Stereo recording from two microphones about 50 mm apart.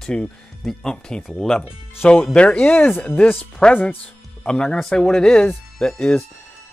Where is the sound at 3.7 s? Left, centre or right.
Left.